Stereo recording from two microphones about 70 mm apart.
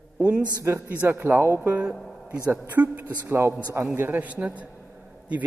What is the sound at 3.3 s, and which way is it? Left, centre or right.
A man's voice, right.